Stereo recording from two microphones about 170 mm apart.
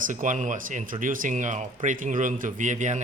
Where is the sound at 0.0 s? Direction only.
50° right (ahead or behind).